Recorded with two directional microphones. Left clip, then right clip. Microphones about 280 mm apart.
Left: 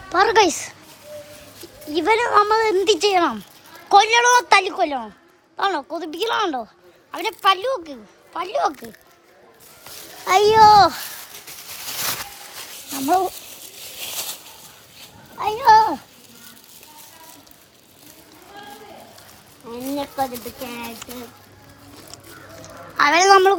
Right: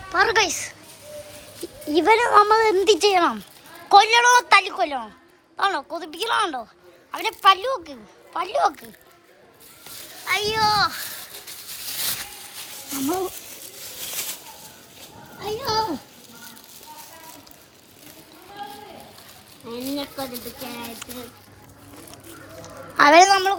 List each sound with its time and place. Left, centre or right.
0.1 s a woman's voice: centre
1.9 s a woman's voice: centre
10.2 s a child's voice: left
13.4 s a sound: centre
13.7 s children playing: centre
15.5 s a child's voice: centre
19.6 s a woman's voice: centre
23.0 s speech: centre